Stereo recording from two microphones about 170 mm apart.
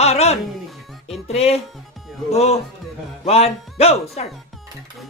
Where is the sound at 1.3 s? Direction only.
35° left (ahead or behind).